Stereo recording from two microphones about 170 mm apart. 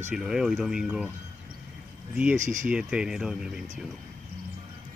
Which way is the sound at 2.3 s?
45° right (ahead or behind).